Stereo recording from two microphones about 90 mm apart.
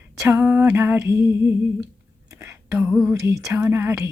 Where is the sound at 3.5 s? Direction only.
20° right (ahead or behind).